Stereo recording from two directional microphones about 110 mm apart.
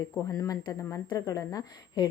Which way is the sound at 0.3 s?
35° left (ahead or behind).